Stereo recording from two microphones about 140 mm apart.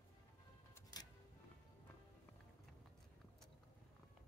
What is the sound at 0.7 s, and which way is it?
Music, 25° left (ahead or behind).